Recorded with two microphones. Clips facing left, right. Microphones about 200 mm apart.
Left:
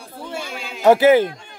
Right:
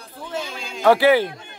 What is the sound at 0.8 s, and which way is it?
Speech, 20° left (ahead or behind).